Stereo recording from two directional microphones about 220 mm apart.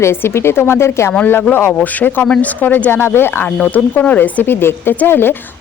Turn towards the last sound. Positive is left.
turn(degrees=10)  # may be behind; listen again after turning